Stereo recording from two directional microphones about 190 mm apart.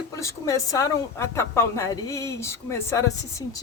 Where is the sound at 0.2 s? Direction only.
15° left (ahead or behind).